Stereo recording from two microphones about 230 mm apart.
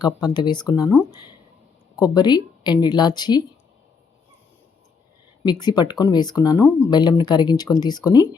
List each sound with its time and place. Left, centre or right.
0.0 s speech: centre
5.4 s speech: centre